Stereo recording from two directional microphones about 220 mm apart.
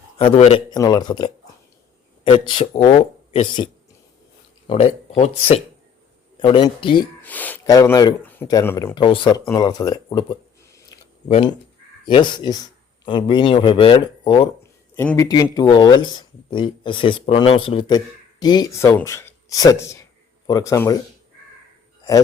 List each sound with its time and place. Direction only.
0.2 s a man's voice: 25° left (ahead or behind)
7.2 s speech: 5° left (ahead or behind)
9.0 s speech: 20° left (ahead or behind)
11.3 s a man's voice: 25° left (ahead or behind)